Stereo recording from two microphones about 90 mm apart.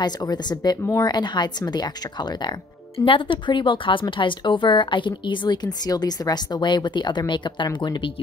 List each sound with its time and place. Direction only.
0.0 s speech: 50° left (ahead or behind)
3.1 s speech: 70° left (ahead or behind); by 8.1 s 55° left (ahead or behind)